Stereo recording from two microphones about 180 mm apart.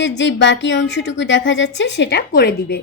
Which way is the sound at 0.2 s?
85° left.